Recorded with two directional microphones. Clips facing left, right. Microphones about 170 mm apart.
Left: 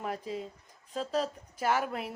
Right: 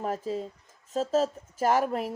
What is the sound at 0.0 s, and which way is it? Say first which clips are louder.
Speech: right 5 dB; 40° right (ahead or behind).